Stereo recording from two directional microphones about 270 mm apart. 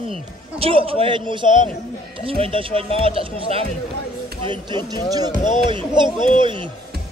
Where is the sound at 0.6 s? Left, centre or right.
Right.